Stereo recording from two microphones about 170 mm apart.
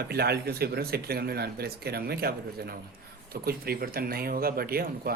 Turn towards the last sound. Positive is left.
turn(degrees=-60)  # may be behind; listen again after turning